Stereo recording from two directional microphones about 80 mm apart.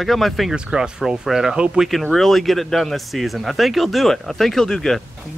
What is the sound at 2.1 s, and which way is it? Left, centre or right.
Speech, centre.